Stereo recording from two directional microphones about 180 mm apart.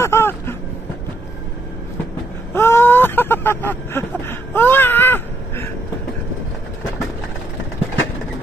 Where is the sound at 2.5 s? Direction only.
15° left (ahead or behind).